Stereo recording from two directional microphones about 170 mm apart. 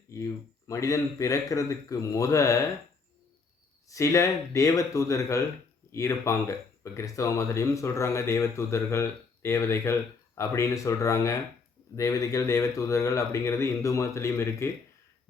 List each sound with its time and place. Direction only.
0.7 s a man's voice: 20° left (ahead or behind)
3.8 s speech: 20° left (ahead or behind)